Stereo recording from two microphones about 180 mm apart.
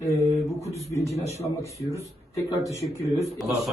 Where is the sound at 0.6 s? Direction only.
35° left (ahead or behind).